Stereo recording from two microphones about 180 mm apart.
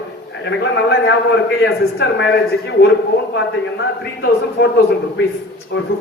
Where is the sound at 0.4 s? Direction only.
75° left (ahead or behind).